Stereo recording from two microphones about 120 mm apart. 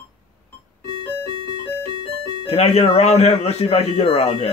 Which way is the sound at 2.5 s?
60° left (ahead or behind).